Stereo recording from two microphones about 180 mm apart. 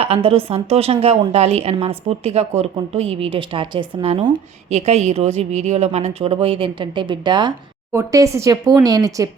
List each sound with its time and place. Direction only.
0.0 s a woman's voice: 35° right (ahead or behind)